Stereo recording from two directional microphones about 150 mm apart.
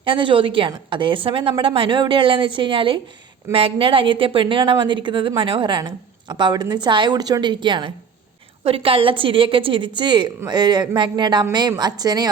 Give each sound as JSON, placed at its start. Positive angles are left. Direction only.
{"t": 0.0, "sound": "a woman's voice", "side_deg": -35}